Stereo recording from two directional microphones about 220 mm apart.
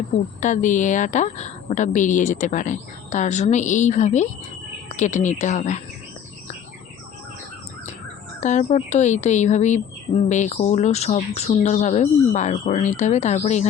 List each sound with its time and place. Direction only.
0.3 s speech: 35° left (ahead or behind)
8.4 s speech: 30° left (ahead or behind)